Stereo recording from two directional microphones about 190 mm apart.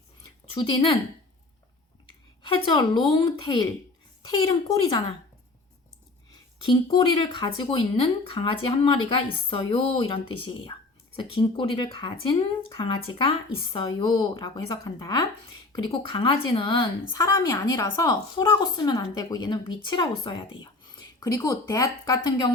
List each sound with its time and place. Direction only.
0.5 s a woman's voice: 25° left (ahead or behind)
2.6 s a woman's voice: 20° left (ahead or behind)
6.7 s a woman's voice: 25° left (ahead or behind)